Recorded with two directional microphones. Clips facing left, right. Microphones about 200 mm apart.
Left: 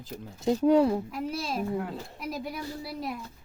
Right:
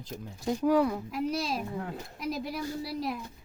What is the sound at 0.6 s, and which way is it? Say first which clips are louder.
Speech: left 3 dB; 25° left (ahead or behind).